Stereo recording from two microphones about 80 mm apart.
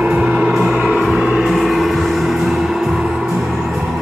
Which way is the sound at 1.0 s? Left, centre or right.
Centre.